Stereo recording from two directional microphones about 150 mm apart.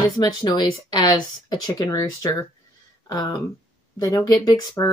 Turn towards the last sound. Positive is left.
turn(degrees=25)  # may be behind; listen again after turning